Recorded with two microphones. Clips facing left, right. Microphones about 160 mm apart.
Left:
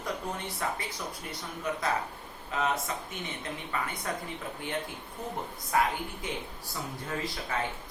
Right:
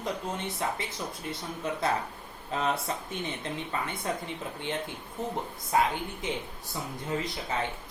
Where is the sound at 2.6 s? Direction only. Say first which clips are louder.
Even; 30° right (ahead or behind).